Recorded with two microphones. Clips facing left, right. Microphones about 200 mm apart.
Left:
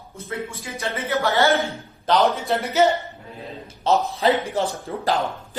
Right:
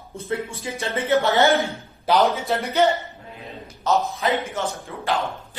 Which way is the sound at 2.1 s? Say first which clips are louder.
Even; 10° right (ahead or behind).